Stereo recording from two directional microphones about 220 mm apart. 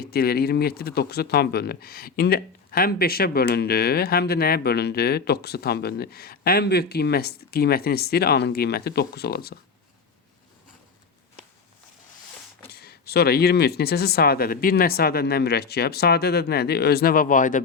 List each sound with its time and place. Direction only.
0.0 s speech: 45° left (ahead or behind)
12.7 s speech: 45° left (ahead or behind)